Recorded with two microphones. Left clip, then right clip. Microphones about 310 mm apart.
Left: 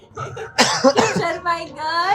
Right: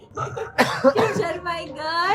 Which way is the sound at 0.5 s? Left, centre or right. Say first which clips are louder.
Left 3 dB; centre.